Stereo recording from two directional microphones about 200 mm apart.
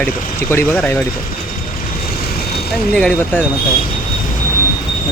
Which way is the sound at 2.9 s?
5° left (ahead or behind).